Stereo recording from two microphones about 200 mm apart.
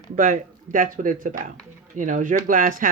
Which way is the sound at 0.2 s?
45° right (ahead or behind).